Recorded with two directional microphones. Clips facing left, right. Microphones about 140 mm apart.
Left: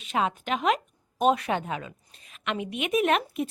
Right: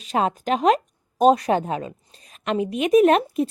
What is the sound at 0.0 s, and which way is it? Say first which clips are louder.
A woman's voice: right 5 dB; 40° right (ahead or behind).